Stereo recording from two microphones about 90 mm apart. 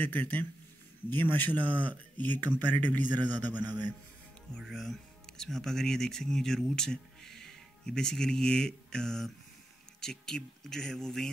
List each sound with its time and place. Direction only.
0.0 s a man's voice: 20° left (ahead or behind)
3.5 s a man's voice: 50° right (ahead or behind)
4.6 s speech: centre (ahead or behind)